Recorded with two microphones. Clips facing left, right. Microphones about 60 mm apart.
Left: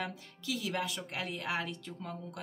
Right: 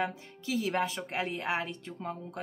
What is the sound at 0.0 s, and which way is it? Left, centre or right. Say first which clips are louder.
Speech: right 6 dB; right.